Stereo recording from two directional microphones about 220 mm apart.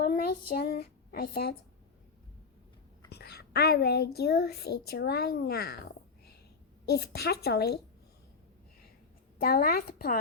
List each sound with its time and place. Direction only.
0.0 s child singing: 40° left (ahead or behind)
0.5 s speech: 45° left (ahead or behind)
3.1 s a woman's voice: 45° left (ahead or behind)
6.8 s a woman's voice: 45° left (ahead or behind)
9.4 s a woman's voice: 40° left (ahead or behind)